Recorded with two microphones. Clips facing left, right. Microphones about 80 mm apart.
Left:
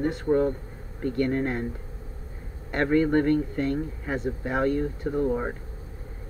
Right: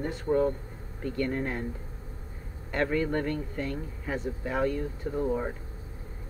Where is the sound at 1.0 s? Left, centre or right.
Left.